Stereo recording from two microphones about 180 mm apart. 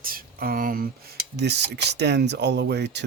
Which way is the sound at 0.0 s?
55° right (ahead or behind).